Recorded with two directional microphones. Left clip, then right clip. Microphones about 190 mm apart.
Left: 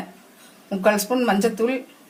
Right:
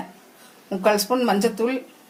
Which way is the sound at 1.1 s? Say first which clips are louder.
Even; 5° right (ahead or behind).